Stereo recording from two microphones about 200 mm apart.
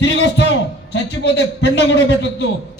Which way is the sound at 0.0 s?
60° left (ahead or behind).